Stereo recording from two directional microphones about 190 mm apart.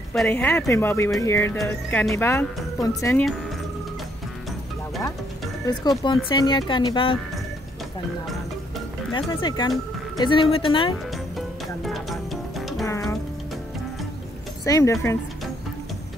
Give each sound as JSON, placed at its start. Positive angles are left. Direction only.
{"t": 0.1, "sound": "speech", "side_deg": 5}
{"t": 5.7, "sound": "speech", "side_deg": 25}
{"t": 9.3, "sound": "speech", "side_deg": 20}
{"t": 11.3, "sound": "music", "side_deg": 0}
{"t": 12.8, "sound": "music", "side_deg": 15}
{"t": 14.6, "sound": "speech", "side_deg": 15}